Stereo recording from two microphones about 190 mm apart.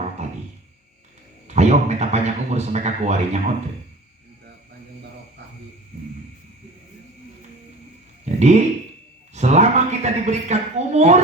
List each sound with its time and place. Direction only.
1.5 s a man's voice: 35° right (ahead or behind)
8.2 s a sound: 35° right (ahead or behind)
9.3 s a man's voice: 35° right (ahead or behind)